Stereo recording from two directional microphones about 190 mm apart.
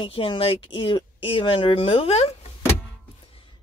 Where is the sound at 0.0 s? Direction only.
30° left (ahead or behind).